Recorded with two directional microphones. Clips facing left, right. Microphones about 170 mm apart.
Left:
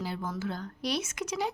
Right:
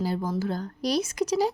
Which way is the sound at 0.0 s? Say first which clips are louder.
Right 7 dB; 35° right (ahead or behind).